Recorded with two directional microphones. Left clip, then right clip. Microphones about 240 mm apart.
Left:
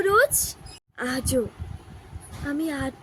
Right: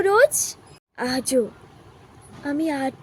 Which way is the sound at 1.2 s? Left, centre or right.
Centre.